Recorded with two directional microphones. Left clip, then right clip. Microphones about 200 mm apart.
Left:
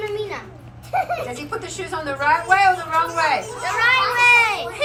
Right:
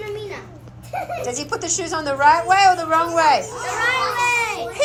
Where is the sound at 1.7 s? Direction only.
35° right (ahead or behind).